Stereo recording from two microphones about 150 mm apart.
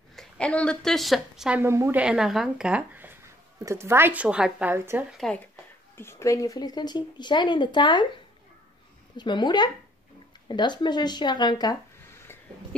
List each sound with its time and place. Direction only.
0.1 s speech: 5° left (ahead or behind)
1.6 s a woman's voice: 15° right (ahead or behind)
5.1 s speech: 5° left (ahead or behind)
5.9 s speech: 15° left (ahead or behind)
9.1 s speech: 30° left (ahead or behind)